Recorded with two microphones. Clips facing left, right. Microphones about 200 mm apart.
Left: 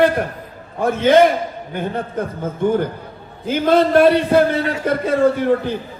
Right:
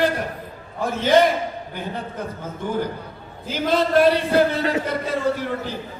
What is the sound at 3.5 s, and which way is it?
A man's voice, 55° left (ahead or behind).